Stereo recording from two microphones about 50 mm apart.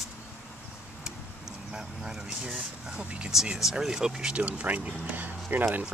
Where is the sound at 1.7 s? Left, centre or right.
Centre.